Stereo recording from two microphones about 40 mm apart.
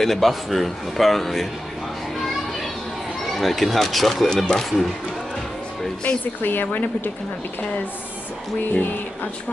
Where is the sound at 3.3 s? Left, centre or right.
Centre.